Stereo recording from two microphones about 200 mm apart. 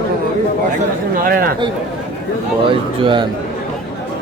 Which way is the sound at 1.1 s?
45° right (ahead or behind).